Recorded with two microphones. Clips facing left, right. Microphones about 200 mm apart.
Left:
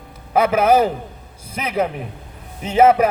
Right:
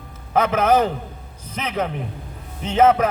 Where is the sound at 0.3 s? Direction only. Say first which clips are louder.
Left 3 dB; 10° left (ahead or behind).